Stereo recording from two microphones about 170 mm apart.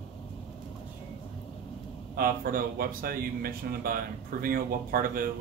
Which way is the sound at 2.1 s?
60° right (ahead or behind).